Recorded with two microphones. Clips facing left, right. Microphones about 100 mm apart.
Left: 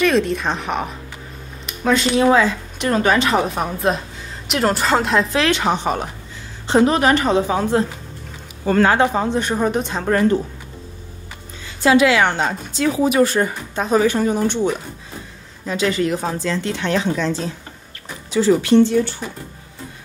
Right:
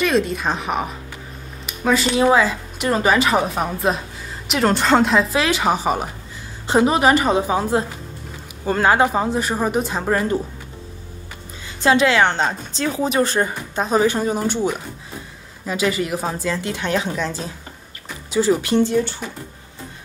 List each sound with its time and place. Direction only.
0.0 s speech: centre (ahead or behind)
11.8 s a woman's voice: 30° right (ahead or behind)
15.6 s speech: 5° right (ahead or behind)